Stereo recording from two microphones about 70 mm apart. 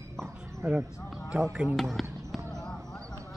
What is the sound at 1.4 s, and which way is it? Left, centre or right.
Speech, centre.